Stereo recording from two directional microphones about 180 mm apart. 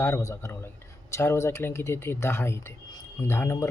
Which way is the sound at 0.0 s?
15° left (ahead or behind).